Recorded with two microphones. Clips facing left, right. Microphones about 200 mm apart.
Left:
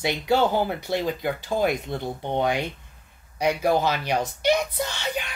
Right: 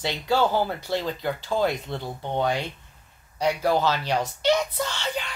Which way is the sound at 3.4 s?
15° left (ahead or behind).